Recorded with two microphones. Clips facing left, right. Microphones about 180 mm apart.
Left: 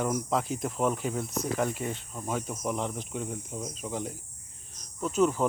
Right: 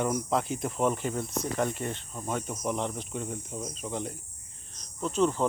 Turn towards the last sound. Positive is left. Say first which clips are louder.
# left 1 dB
turn(degrees=5)  # may be behind; listen again after turning